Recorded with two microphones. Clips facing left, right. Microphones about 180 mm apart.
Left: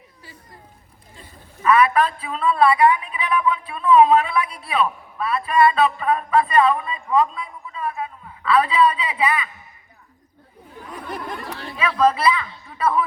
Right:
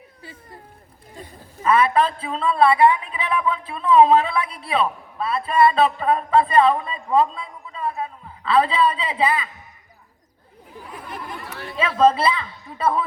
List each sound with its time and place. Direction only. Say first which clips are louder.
1.6 s a man's voice: left 1 dB; 25° right (ahead or behind)
11.8 s a man's voice: right 2 dB; 25° right (ahead or behind)